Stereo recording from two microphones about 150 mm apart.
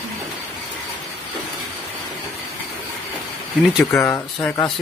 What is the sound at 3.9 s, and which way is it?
Speech, 15° left (ahead or behind).